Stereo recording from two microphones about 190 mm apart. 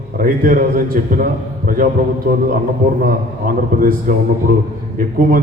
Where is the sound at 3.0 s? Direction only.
45° right (ahead or behind).